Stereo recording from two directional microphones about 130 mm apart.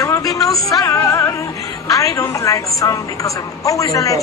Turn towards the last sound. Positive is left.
turn(degrees=25)  # may be behind; listen again after turning